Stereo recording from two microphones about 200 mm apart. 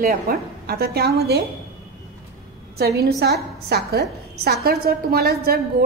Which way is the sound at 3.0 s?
55° right (ahead or behind).